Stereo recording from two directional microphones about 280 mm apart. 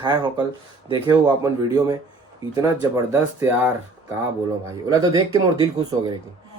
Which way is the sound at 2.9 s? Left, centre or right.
Centre.